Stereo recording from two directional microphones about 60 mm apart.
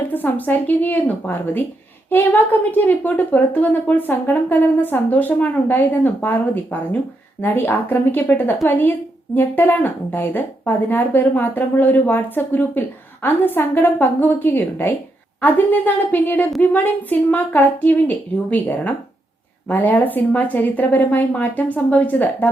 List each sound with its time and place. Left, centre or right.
0.1 s a woman's voice: left